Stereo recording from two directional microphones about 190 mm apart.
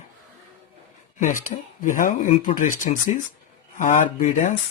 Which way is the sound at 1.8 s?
45° left (ahead or behind).